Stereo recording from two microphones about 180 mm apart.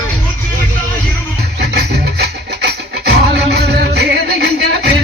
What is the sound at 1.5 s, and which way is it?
Music, 65° right (ahead or behind).